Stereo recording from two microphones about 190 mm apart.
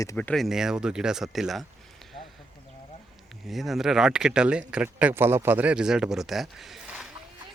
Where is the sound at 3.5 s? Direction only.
Centre (ahead or behind).